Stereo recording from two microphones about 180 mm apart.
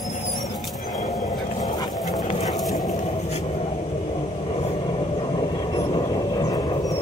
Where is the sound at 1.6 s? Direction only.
20° left (ahead or behind).